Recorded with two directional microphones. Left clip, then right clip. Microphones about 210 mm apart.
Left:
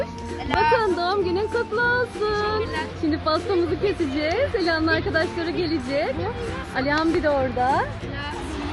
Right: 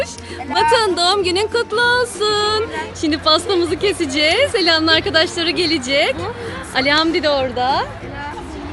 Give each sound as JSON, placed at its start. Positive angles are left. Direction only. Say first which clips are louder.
{"t": 0.5, "sound": "speech", "louder": "right 5 dB", "side_deg": 0}
{"t": 0.8, "sound": "a woman's voice", "louder": "right 6 dB", "side_deg": -25}
{"t": 7.3, "sound": "speech", "louder": "right 4 dB", "side_deg": 0}